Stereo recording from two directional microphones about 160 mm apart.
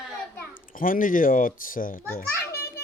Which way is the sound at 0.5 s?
60° left (ahead or behind).